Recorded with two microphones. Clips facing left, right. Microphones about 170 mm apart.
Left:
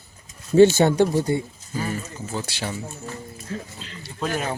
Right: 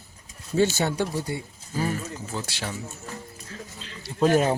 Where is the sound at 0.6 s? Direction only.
50° left (ahead or behind).